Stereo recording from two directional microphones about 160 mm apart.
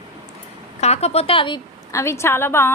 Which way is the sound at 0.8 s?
40° left (ahead or behind).